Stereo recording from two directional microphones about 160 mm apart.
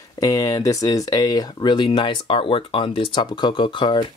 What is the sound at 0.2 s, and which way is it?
Speech, 20° left (ahead or behind).